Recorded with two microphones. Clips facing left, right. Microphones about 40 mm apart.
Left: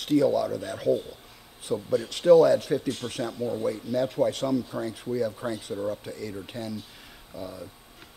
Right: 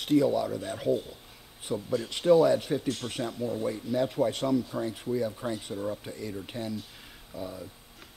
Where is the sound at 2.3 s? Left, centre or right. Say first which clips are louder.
Left 4 dB; centre.